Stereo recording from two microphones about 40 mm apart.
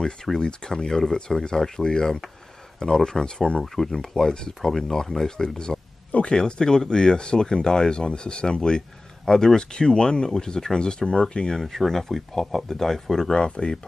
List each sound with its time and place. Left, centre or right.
0.0 s speech: centre
3.6 s speech: centre
11.5 s speech: centre
13.3 s speech: left